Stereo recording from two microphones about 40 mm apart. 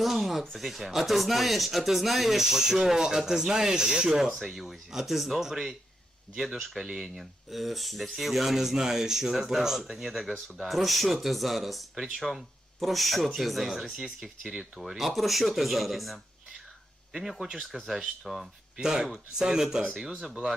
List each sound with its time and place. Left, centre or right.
0.0 s a sound: centre
0.5 s speech: centre
18.8 s speech: centre
20.2 s speech: centre